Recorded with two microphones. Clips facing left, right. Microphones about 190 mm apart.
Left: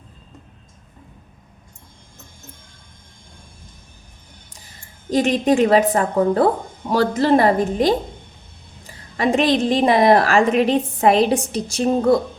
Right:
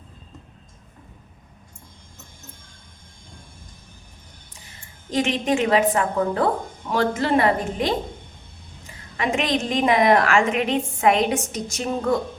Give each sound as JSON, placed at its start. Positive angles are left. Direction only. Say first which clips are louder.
{"t": 5.1, "sound": "a woman's voice", "louder": "left 5 dB", "side_deg": 40}